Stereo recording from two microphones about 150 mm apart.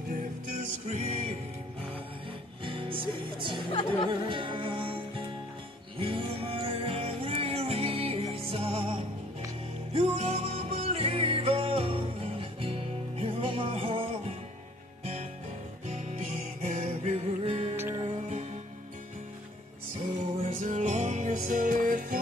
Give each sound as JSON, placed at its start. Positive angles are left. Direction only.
{"t": 0.8, "sound": "music", "side_deg": -45}
{"t": 2.6, "sound": "music", "side_deg": -35}
{"t": 9.9, "sound": "music", "side_deg": -45}
{"t": 15.9, "sound": "music", "side_deg": -50}
{"t": 17.7, "sound": "music", "side_deg": -15}
{"t": 20.4, "sound": "music", "side_deg": -60}